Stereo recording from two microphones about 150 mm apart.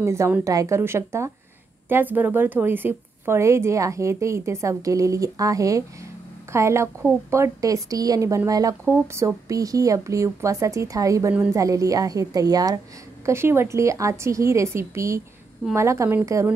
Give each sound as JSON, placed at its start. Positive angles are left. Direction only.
{"t": 0.0, "sound": "a woman's voice", "side_deg": -15}